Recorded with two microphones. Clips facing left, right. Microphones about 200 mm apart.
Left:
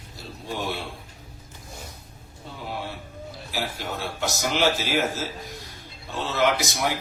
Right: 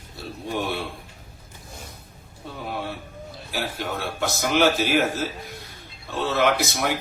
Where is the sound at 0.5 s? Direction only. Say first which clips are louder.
Right 3 dB; 55° right (ahead or behind).